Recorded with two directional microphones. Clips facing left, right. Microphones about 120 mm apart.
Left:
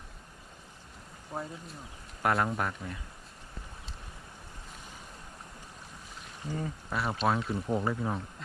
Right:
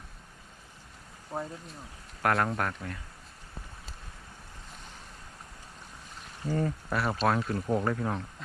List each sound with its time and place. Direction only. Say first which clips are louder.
1.3 s speech: right 2 dB; 5° right (ahead or behind)
6.5 s speech: right 5 dB; 55° right (ahead or behind)
7.0 s speech: right 1 dB; centre (ahead or behind)